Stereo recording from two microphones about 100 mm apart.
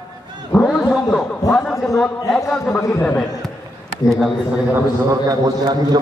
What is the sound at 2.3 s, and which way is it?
Speech, 5° left (ahead or behind).